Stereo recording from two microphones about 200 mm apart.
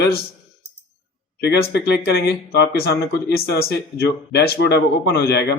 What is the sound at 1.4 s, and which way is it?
Speech, 55° left (ahead or behind).